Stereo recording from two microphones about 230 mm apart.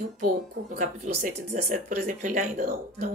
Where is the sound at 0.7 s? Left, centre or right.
Right.